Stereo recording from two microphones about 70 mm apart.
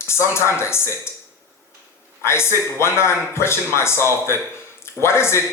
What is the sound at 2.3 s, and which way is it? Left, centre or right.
A man's voice, left.